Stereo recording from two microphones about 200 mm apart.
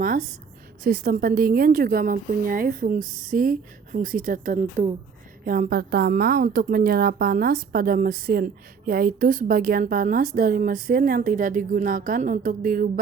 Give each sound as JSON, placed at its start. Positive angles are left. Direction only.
{"t": 0.9, "sound": "a woman's voice", "side_deg": -50}